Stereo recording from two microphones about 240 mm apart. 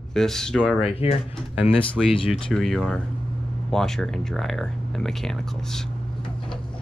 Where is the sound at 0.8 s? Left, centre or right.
Left.